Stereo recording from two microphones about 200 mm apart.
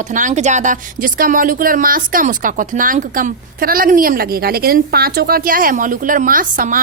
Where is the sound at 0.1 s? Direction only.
40° right (ahead or behind).